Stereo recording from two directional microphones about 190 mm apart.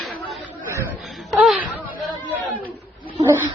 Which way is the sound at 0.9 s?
5° right (ahead or behind).